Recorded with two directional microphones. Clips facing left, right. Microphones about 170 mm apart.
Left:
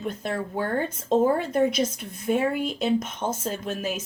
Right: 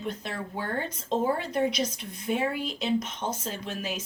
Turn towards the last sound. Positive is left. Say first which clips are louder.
# left 4 dB
turn(degrees=50)  # may be behind; listen again after turning